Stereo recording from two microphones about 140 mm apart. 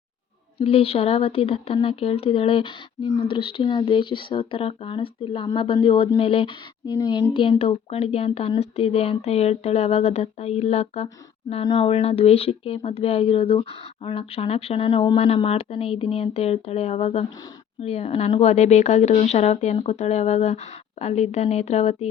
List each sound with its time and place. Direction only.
0.6 s speech: 45° left (ahead or behind)
7.6 s speech: 45° left (ahead or behind)
11.6 s speech: 35° left (ahead or behind)
11.9 s speech: 45° left (ahead or behind)